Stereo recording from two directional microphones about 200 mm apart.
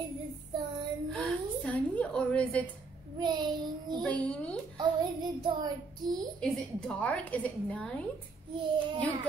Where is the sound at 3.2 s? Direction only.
20° right (ahead or behind).